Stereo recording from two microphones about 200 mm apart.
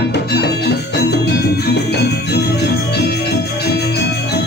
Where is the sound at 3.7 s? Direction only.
55° left (ahead or behind).